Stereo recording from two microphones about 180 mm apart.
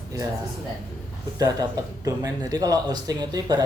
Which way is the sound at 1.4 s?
20° right (ahead or behind).